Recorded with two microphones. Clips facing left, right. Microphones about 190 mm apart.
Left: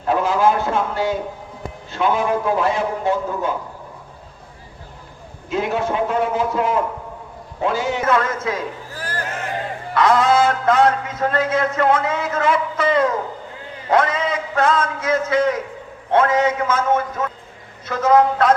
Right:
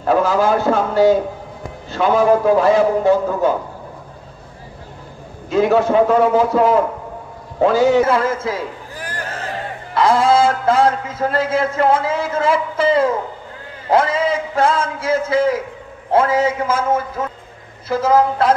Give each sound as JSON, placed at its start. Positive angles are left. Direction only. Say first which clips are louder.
{"t": 0.1, "sound": "a man's voice", "louder": "right 2 dB", "side_deg": -40}
{"t": 5.5, "sound": "a man's voice", "louder": "right 7 dB", "side_deg": -40}
{"t": 9.9, "sound": "a man's voice", "louder": "right 2 dB", "side_deg": -30}